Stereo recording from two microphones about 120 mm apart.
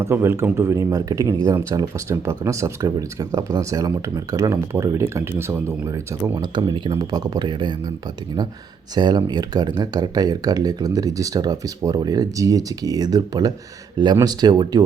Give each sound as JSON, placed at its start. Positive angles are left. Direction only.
{"t": 0.0, "sound": "speech", "side_deg": -20}
{"t": 9.0, "sound": "speech", "side_deg": -35}